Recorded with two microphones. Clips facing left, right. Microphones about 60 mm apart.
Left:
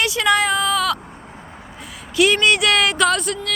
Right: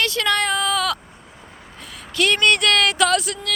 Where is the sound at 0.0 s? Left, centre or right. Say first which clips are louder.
Left 3 dB; centre.